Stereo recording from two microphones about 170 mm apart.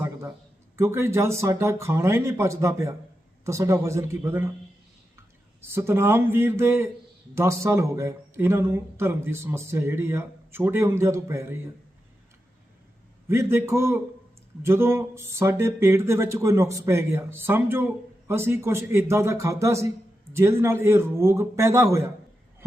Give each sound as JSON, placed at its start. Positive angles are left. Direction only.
{"t": 0.8, "sound": "speech", "side_deg": -15}
{"t": 5.6, "sound": "speech", "side_deg": -15}
{"t": 13.2, "sound": "speech", "side_deg": -15}